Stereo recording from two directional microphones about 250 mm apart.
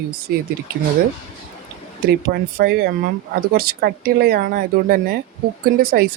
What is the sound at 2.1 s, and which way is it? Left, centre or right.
Speech, right.